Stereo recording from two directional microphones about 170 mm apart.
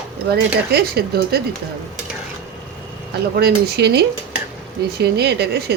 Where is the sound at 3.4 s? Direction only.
70° right (ahead or behind).